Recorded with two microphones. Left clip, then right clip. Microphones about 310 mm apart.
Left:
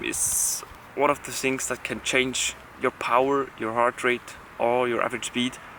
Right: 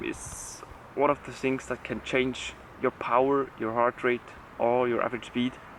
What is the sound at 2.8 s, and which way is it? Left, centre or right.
Speech, centre.